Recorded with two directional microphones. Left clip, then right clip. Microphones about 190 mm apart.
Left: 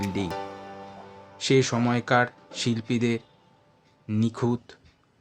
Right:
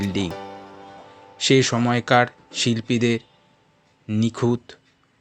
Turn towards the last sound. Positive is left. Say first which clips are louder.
# right 5 dB
turn(degrees=-15)  # may be behind; listen again after turning